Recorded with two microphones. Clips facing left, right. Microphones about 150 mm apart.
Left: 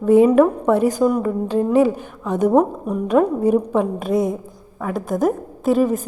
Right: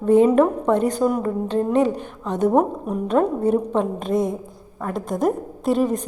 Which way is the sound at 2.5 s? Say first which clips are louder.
Left 3 dB; centre (ahead or behind).